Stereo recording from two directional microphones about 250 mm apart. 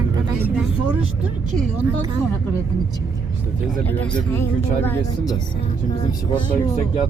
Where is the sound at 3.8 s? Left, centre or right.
Centre.